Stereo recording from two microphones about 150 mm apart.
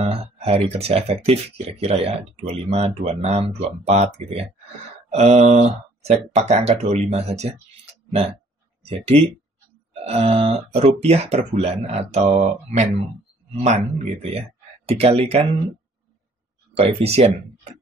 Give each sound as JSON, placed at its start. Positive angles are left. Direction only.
{"t": 0.0, "sound": "speech", "side_deg": -40}
{"t": 7.8, "sound": "clicking", "side_deg": -45}
{"t": 8.8, "sound": "speech", "side_deg": -40}
{"t": 16.7, "sound": "speech", "side_deg": -45}